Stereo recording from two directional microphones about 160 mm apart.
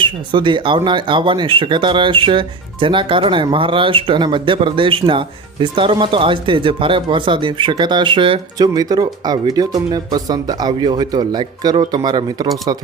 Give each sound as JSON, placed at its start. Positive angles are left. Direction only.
{"t": 0.0, "sound": "speech", "side_deg": -30}